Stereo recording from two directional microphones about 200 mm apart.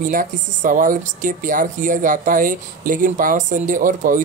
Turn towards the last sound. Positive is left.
turn(degrees=-40)  # may be behind; listen again after turning